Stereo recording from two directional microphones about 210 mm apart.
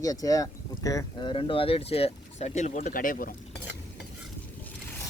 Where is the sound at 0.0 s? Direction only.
15° left (ahead or behind); by 3.3 s 40° left (ahead or behind).